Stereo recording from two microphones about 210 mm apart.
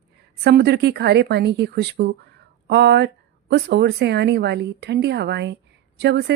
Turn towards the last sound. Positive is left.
turn(degrees=-55)  # may be behind; listen again after turning